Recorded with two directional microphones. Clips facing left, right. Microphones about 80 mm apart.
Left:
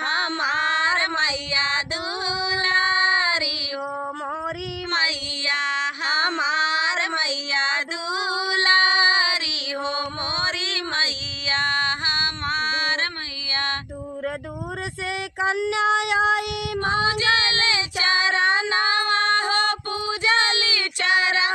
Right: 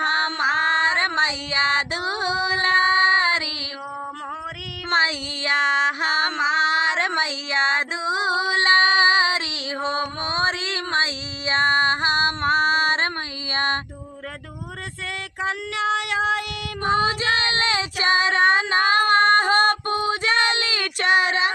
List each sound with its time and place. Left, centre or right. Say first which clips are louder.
0.0 s child singing: right 2 dB; right
4.9 s female singing: right 5 dB; right
9.8 s music: right 3 dB; right
15.4 s child singing: left 4 dB; centre
17.0 s child singing: even; right